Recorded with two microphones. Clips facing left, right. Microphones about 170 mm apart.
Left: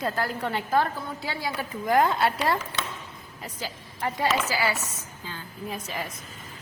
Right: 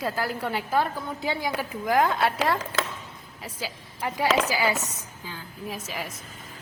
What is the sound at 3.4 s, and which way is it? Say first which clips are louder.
Speech: right 1 dB; 10° right (ahead or behind).